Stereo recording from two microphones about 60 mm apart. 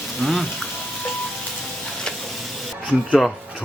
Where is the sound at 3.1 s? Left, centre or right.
Centre.